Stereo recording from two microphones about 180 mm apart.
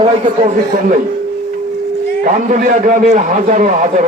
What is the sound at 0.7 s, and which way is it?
Speech, 50° right (ahead or behind).